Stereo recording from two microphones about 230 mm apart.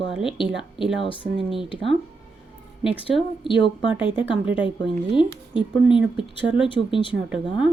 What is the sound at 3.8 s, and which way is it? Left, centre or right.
Speech, centre.